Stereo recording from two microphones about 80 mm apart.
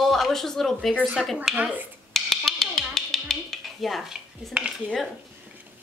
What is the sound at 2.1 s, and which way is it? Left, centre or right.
Music, centre.